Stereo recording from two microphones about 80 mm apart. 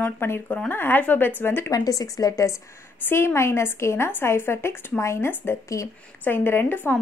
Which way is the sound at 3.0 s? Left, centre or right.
Left.